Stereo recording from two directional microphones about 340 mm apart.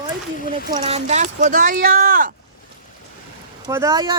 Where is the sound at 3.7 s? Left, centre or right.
Centre.